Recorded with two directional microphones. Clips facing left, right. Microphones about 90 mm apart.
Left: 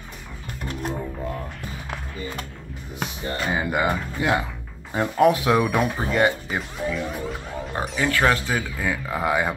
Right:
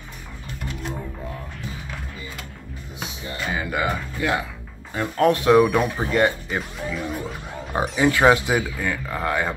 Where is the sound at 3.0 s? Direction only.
50° left (ahead or behind).